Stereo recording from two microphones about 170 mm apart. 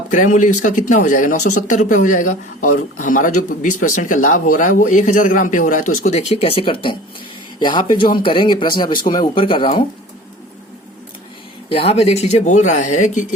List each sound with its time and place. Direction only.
0.1 s speech: 50° left (ahead or behind); by 9.8 s 30° left (ahead or behind)
11.7 s speech: 35° left (ahead or behind)